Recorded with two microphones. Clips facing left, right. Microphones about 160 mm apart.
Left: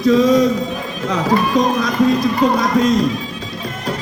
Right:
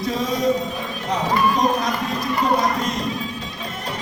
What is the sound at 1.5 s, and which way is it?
Music, 90° left.